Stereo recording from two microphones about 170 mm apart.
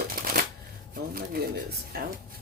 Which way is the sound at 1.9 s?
65° right (ahead or behind).